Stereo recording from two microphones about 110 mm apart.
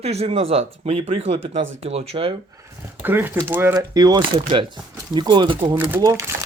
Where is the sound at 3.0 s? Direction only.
20° right (ahead or behind); by 5.6 s 45° right (ahead or behind).